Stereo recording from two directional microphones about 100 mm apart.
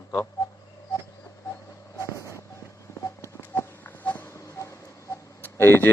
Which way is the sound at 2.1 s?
30° left (ahead or behind).